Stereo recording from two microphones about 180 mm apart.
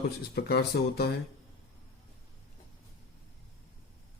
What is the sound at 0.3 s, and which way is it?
Speech, 60° left (ahead or behind).